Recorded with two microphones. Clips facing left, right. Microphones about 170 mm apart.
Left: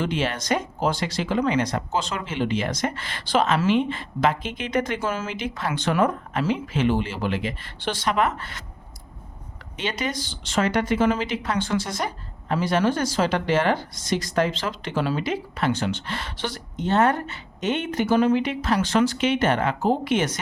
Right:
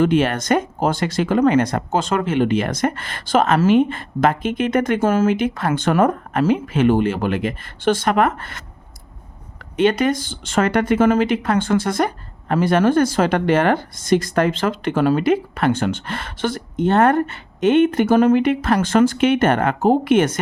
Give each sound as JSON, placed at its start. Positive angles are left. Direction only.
{"t": 0.0, "sound": "speech", "side_deg": -55}
{"t": 9.7, "sound": "speech", "side_deg": -55}